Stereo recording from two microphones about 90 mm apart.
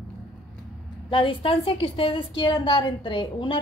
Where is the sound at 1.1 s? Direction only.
70° left (ahead or behind).